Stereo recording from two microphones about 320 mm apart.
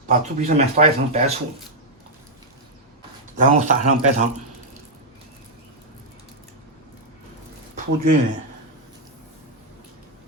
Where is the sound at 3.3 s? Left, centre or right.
Right.